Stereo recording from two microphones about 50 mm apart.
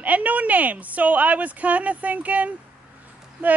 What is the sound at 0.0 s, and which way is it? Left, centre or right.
A woman's voice, right.